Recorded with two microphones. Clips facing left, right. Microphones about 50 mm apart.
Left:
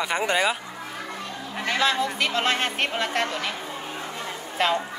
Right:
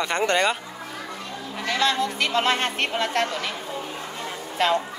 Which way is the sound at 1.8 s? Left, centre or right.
Centre.